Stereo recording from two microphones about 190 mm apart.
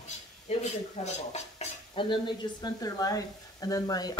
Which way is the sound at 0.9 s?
35° left (ahead or behind).